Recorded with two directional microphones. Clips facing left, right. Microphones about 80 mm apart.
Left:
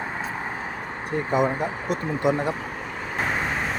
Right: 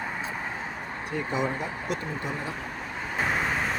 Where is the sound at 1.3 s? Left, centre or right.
Left.